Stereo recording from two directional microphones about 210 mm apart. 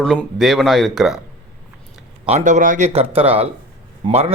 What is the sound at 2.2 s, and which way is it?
A man's voice, 35° right (ahead or behind).